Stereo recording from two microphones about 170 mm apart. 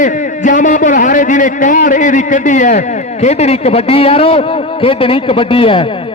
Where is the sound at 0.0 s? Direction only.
50° left (ahead or behind).